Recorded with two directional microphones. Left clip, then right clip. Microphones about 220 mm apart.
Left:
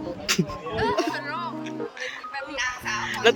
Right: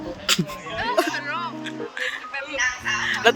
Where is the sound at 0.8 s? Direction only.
10° left (ahead or behind).